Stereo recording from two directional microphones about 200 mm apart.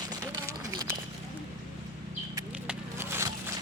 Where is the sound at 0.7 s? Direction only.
15° right (ahead or behind).